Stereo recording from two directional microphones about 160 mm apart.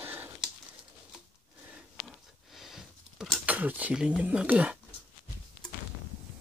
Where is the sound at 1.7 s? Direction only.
Centre (ahead or behind).